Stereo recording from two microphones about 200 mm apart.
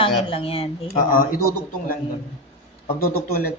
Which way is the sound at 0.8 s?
45° left (ahead or behind).